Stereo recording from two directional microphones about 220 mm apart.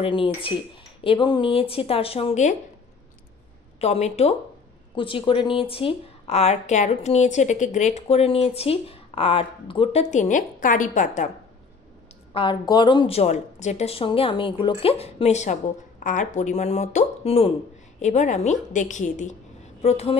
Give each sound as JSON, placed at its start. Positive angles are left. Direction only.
{"t": 0.0, "sound": "a woman's voice", "side_deg": 25}
{"t": 3.8, "sound": "a woman's voice", "side_deg": 30}
{"t": 12.4, "sound": "a woman's voice", "side_deg": 20}